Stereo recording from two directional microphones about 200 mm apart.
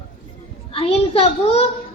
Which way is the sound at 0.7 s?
30° left (ahead or behind).